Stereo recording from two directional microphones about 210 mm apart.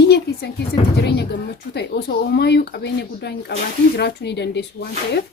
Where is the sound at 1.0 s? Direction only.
55° left (ahead or behind).